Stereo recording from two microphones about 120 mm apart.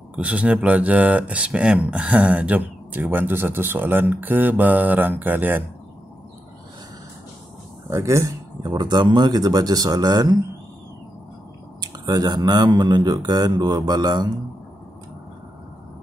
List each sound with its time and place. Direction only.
0.1 s speech: 10° right (ahead or behind)
7.9 s speech: 25° right (ahead or behind)
12.1 s speech: 35° right (ahead or behind)